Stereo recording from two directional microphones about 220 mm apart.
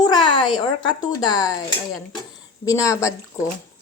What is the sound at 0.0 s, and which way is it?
Speech, 20° left (ahead or behind).